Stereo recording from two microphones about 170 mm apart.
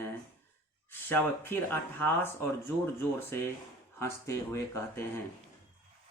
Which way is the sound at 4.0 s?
15° left (ahead or behind).